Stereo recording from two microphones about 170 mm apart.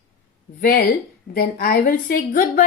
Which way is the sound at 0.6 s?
55° left (ahead or behind).